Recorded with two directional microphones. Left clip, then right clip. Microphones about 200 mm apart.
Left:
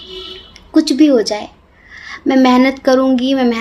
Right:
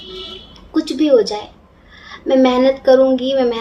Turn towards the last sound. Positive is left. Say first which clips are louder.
# left 1 dB
turn(degrees=55)  # may be behind; listen again after turning